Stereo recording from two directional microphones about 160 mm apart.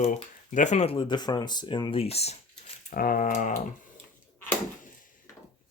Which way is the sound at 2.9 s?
60° left (ahead or behind).